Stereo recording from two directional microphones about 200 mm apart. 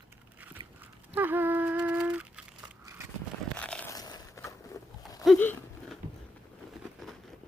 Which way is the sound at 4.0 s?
20° left (ahead or behind).